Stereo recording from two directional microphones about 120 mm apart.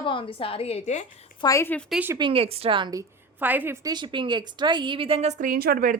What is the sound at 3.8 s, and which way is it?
A woman's voice, 40° right (ahead or behind).